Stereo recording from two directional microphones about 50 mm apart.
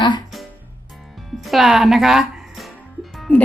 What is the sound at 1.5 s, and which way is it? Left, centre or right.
Speech, centre.